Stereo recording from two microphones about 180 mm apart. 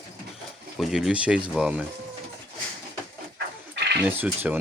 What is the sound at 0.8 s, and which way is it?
Speech, 5° right (ahead or behind).